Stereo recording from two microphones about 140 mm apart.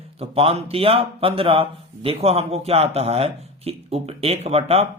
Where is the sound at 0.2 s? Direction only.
45° right (ahead or behind).